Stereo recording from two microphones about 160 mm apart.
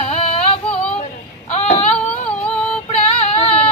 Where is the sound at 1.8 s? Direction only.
5° left (ahead or behind).